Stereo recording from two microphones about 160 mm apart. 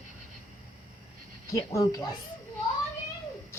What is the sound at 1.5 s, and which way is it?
Speech, 20° left (ahead or behind).